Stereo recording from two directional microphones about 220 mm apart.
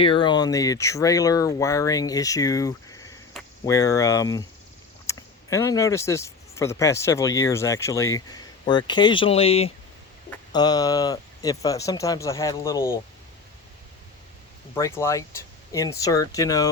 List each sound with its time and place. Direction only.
0.0 s speech: 20° left (ahead or behind)
3.3 s a sound: centre (ahead or behind)
3.7 s speech: 15° left (ahead or behind)
14.8 s speech: 15° left (ahead or behind)